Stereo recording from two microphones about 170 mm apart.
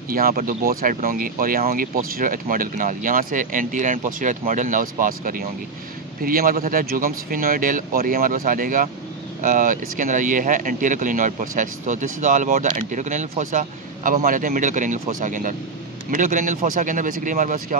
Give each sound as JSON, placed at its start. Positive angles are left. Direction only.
{"t": 0.1, "sound": "speech", "side_deg": -60}